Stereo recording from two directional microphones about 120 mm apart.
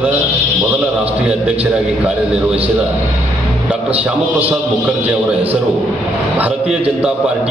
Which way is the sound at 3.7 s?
10° right (ahead or behind).